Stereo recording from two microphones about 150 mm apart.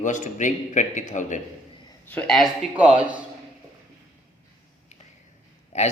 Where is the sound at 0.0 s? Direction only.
55° left (ahead or behind).